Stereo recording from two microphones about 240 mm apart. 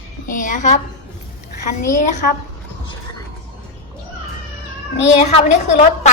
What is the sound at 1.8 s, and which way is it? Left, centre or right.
Speech, left.